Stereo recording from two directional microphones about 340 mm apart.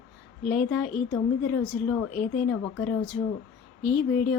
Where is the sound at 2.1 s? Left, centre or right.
Left.